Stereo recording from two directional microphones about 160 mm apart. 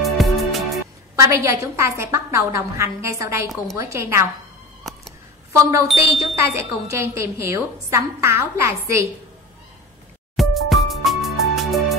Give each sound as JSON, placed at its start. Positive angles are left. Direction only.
{"t": 0.0, "sound": "music", "side_deg": 0}
{"t": 1.1, "sound": "a woman's voice", "side_deg": -20}
{"t": 4.9, "sound": "a sound", "side_deg": 0}
{"t": 5.5, "sound": "a woman's voice", "side_deg": -20}
{"t": 10.3, "sound": "music", "side_deg": 0}